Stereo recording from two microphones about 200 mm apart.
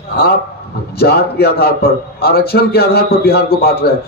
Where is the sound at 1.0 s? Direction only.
50° left (ahead or behind).